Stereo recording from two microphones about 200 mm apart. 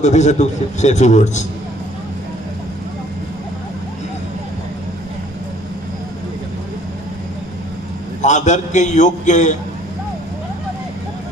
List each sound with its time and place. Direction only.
0.0 s a man's voice: 35° left (ahead or behind)
8.2 s a man's voice: 35° left (ahead or behind)